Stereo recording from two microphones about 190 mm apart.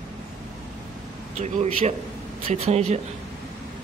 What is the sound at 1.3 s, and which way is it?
Speech, 35° right (ahead or behind).